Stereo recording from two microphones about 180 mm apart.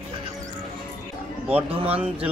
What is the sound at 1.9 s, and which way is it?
Speech, 5° right (ahead or behind).